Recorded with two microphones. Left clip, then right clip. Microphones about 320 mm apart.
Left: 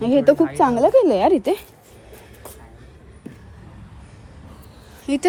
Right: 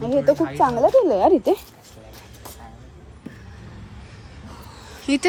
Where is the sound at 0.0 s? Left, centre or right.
Left.